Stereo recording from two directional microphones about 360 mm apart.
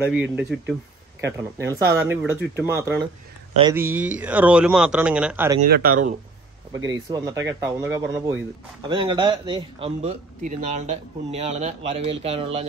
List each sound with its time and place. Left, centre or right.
0.0 s speech: centre
5.6 s speech: right
6.9 s speech: centre